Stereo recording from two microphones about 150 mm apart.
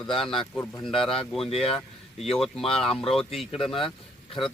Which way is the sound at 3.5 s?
35° left (ahead or behind).